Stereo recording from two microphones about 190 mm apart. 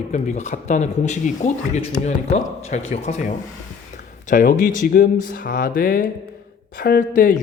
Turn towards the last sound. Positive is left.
turn(degrees=45)  # may be behind; listen again after turning